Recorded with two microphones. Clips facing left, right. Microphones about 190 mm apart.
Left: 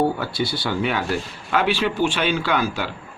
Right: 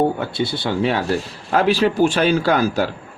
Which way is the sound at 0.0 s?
25° right (ahead or behind).